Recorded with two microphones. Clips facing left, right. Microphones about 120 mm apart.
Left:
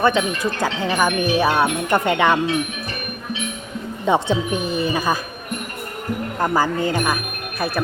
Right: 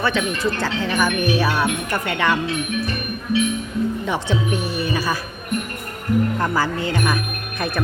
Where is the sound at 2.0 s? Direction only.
20° left (ahead or behind).